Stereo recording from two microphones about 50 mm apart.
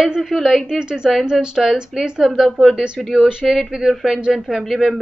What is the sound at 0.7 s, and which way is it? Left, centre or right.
A woman's voice, centre.